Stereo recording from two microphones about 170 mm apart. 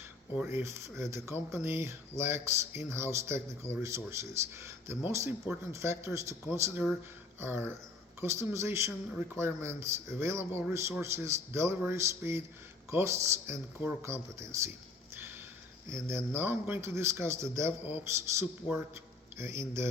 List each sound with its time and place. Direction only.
0.3 s speech: 15° right (ahead or behind)
15.1 s a sound: 15° right (ahead or behind)
15.9 s speech: 15° right (ahead or behind)